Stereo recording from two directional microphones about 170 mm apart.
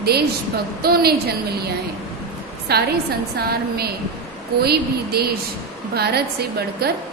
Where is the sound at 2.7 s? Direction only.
70° right (ahead or behind).